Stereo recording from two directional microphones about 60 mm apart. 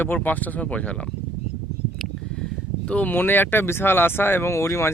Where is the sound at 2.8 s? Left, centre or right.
Left.